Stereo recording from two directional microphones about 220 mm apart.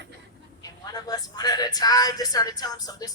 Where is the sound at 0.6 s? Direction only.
15° left (ahead or behind).